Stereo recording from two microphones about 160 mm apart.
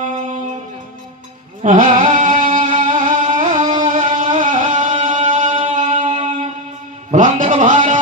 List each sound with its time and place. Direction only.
0.0 s music: 50° right (ahead or behind)
1.6 s music: 50° right (ahead or behind)
6.1 s music: 35° right (ahead or behind)
7.1 s a sound: 55° right (ahead or behind)